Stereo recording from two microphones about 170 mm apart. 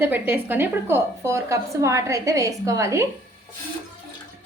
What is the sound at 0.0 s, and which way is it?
A woman's voice, 10° right (ahead or behind).